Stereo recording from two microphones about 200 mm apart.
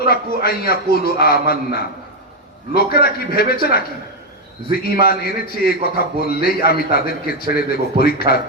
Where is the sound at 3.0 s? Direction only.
50° left (ahead or behind).